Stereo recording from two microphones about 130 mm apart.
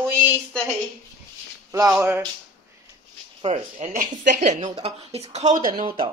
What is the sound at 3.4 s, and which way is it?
Speech, 50° right (ahead or behind).